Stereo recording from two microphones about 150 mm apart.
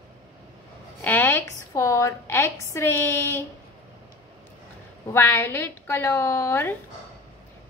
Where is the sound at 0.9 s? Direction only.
15° left (ahead or behind).